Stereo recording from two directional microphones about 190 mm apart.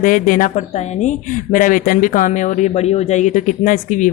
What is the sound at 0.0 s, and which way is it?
Speech, 45° left (ahead or behind).